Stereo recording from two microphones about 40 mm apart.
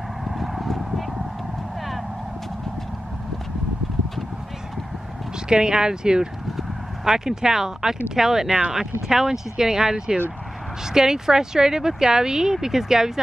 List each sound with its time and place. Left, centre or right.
0.2 s clip-clop: centre
0.7 s honk: centre
5.5 s speech: centre
8.5 s speech: right
8.7 s speech: centre